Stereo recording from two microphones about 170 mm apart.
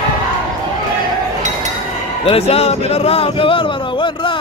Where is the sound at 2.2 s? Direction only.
35° left (ahead or behind).